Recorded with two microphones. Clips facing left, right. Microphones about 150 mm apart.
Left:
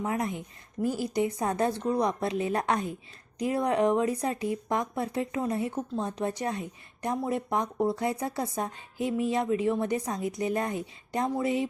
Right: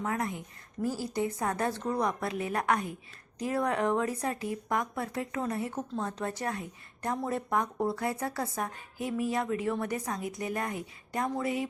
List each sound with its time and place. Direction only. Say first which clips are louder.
0.0 s speech: left 2 dB; 20° left (ahead or behind)